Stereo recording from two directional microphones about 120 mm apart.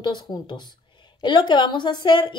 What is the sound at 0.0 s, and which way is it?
A woman's voice, 35° left (ahead or behind).